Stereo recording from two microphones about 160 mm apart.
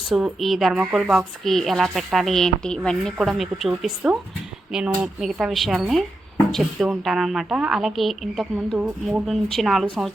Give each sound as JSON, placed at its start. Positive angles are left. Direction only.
{"t": 0.1, "sound": "speech", "side_deg": 0}